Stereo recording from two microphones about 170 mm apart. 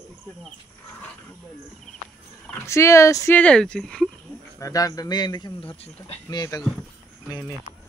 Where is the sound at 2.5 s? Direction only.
15° left (ahead or behind).